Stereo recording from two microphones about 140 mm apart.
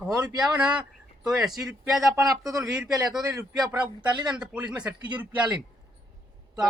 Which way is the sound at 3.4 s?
30° right (ahead or behind).